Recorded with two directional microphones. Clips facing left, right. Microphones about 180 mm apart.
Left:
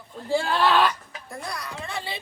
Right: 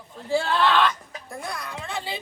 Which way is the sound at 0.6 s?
10° left (ahead or behind).